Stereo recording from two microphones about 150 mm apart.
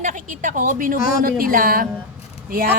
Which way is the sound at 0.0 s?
60° right (ahead or behind).